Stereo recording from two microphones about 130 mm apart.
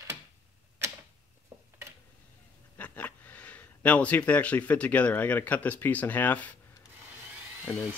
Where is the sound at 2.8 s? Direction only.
10° left (ahead or behind).